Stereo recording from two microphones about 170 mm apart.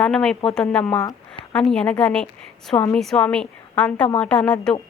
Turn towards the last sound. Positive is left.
turn(degrees=5)  # may be behind; listen again after turning